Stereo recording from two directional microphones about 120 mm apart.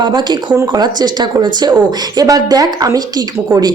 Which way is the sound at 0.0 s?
40° right (ahead or behind).